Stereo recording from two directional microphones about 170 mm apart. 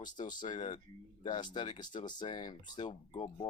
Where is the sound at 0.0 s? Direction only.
25° left (ahead or behind).